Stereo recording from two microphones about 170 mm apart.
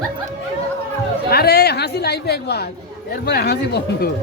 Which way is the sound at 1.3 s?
70° left (ahead or behind).